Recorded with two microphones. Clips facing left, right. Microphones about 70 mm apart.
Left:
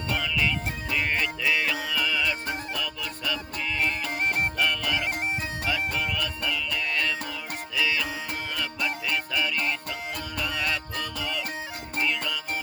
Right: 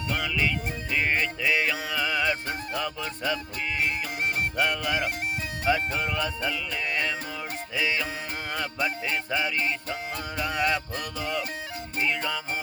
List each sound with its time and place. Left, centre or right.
0.2 s music: centre; by 3.3 s right
4.5 s music: right